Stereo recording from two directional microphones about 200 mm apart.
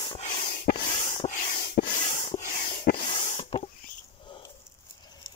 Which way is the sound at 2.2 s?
40° left (ahead or behind).